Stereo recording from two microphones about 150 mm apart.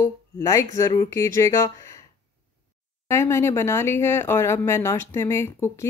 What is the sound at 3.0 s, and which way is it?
Speech, 20° left (ahead or behind).